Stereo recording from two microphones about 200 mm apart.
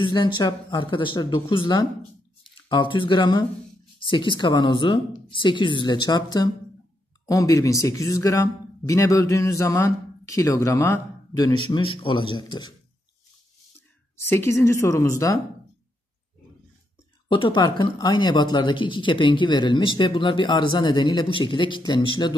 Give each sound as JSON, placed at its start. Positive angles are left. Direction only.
{"t": 0.0, "sound": "speech", "side_deg": 25}
{"t": 14.3, "sound": "speech", "side_deg": 15}
{"t": 17.3, "sound": "speech", "side_deg": 25}